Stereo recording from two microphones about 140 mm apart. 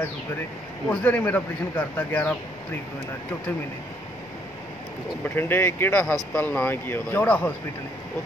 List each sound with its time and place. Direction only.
0.8 s speech: 10° left (ahead or behind)
5.3 s speech: 15° left (ahead or behind)